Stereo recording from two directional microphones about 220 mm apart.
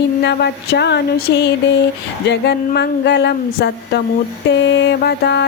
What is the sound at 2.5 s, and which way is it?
A woman's voice, 50° left (ahead or behind).